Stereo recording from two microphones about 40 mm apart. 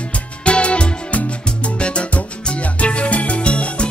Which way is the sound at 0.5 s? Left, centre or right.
Left.